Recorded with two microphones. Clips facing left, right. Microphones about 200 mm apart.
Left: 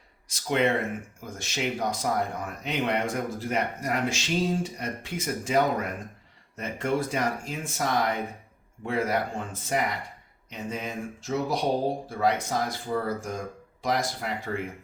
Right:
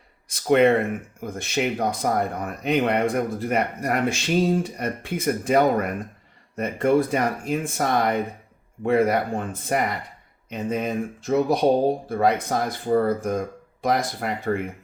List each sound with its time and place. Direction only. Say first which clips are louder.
0.3 s speech: right 8 dB; 55° right (ahead or behind)